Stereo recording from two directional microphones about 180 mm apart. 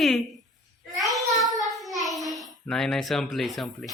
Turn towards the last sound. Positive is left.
turn(degrees=0)  # may be behind; listen again after turning